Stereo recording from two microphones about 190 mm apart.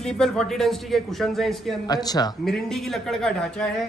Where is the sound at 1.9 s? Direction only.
20° left (ahead or behind).